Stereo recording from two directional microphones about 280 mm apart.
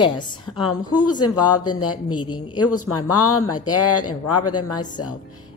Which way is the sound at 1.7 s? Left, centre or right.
Left.